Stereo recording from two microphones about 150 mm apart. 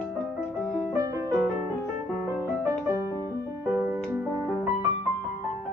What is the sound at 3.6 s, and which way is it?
Music, 10° right (ahead or behind).